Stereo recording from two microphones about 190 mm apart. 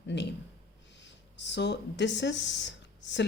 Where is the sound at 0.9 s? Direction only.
70° left (ahead or behind).